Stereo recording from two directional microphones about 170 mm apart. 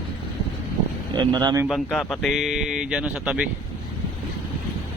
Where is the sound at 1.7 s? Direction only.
Centre (ahead or behind).